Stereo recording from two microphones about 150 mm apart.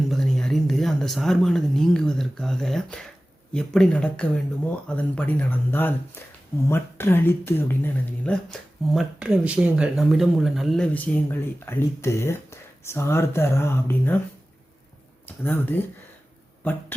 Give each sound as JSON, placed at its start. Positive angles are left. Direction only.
{"t": 0.1, "sound": "speech", "side_deg": 5}
{"t": 10.9, "sound": "speech", "side_deg": 10}
{"t": 15.3, "sound": "speech", "side_deg": 15}